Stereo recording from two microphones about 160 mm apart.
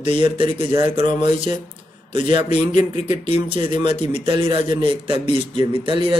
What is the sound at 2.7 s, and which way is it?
Speech, 45° left (ahead or behind).